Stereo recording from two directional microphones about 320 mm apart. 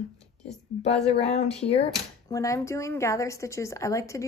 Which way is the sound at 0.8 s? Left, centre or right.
Centre.